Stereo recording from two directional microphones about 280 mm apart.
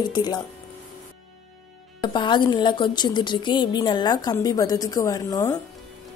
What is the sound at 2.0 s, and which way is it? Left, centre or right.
Speech, centre.